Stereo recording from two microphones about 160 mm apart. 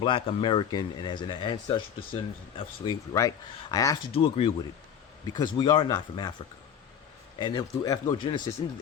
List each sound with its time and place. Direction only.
0.0 s speech: 35° left (ahead or behind)
2.8 s speech: 25° left (ahead or behind)
4.1 s speech: 35° left (ahead or behind)
5.2 s speech: 25° left (ahead or behind)
7.3 s speech: 25° left (ahead or behind)